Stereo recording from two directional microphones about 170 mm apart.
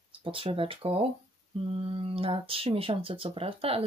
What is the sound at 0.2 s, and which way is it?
Speech, 30° right (ahead or behind).